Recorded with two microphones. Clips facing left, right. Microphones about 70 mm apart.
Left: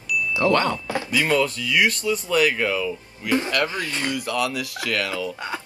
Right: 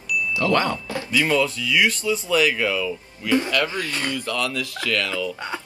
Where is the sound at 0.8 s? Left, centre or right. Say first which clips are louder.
Even; left.